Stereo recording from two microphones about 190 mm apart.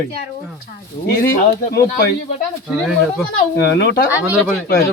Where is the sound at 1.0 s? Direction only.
50° left (ahead or behind).